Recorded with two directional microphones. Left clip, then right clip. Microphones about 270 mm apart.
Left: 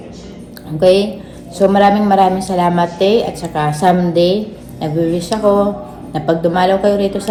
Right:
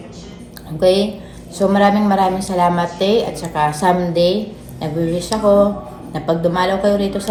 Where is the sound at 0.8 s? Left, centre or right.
Centre.